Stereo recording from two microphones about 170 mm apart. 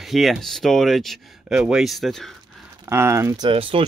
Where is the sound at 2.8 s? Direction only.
15° right (ahead or behind).